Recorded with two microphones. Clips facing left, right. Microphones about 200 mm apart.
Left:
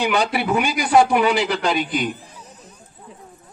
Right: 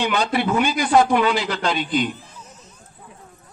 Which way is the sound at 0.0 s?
15° left (ahead or behind).